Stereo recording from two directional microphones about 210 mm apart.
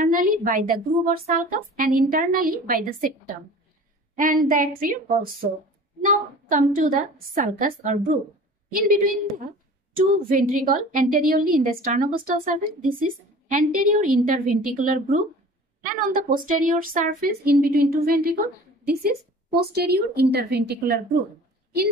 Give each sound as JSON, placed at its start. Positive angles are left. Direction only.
{"t": 0.0, "sound": "a woman's voice", "side_deg": -40}
{"t": 4.2, "sound": "a woman's voice", "side_deg": -40}
{"t": 9.9, "sound": "a woman's voice", "side_deg": -40}